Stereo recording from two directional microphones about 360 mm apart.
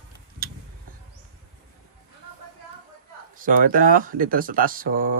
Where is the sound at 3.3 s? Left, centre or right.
Right.